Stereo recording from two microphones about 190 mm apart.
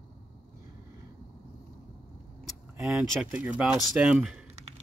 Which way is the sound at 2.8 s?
5° right (ahead or behind).